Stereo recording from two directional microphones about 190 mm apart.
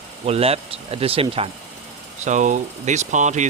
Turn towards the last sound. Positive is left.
turn(degrees=-40)  # may be behind; listen again after turning